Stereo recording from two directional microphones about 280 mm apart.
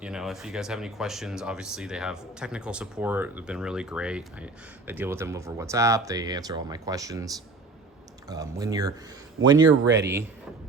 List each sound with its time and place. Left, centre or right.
0.0 s speech: centre
8.3 s speech: centre
9.6 s speech: right